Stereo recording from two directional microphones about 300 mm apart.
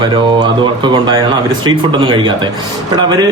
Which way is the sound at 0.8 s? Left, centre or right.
Centre.